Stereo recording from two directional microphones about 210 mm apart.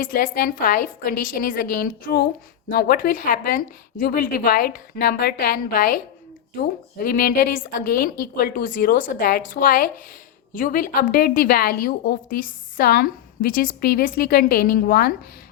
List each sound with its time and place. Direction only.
0.0 s a woman's voice: 45° left (ahead or behind)
7.0 s a woman's voice: 45° left (ahead or behind)